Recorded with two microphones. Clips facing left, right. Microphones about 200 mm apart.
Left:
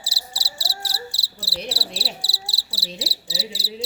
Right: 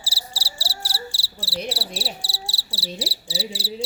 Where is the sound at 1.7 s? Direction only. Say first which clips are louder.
Right 1 dB; 35° left (ahead or behind).